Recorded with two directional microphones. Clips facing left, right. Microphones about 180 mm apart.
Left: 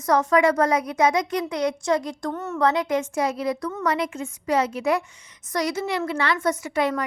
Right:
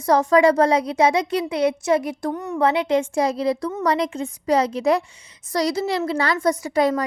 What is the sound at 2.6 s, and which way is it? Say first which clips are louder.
A woman's voice: right 3 dB; 30° right (ahead or behind).